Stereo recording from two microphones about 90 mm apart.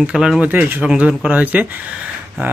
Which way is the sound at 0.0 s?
5° right (ahead or behind).